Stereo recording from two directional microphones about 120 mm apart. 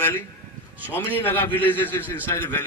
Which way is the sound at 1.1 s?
15° left (ahead or behind).